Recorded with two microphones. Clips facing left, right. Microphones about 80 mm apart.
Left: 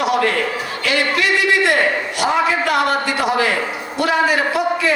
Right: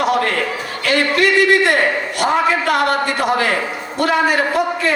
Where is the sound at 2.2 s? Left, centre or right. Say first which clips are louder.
Right 1 dB; right.